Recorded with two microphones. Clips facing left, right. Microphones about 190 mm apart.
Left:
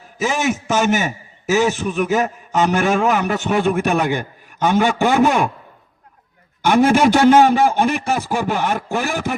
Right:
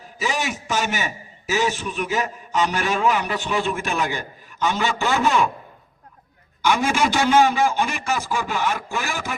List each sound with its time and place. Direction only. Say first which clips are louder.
0.2 s a man's voice: left 6 dB; 45° left (ahead or behind)
6.6 s chopping: left 7 dB; 55° left (ahead or behind)